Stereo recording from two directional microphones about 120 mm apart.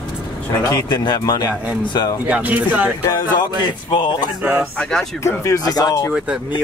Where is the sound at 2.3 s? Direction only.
10° right (ahead or behind).